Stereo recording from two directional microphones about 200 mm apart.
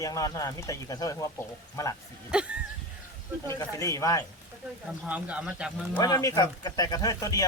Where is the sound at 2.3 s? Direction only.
5° right (ahead or behind).